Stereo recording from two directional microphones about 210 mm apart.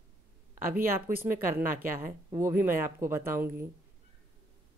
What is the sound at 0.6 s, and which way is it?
A woman's voice, 40° right (ahead or behind).